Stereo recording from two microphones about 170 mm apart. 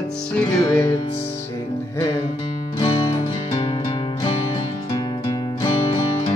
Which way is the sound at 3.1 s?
30° left (ahead or behind).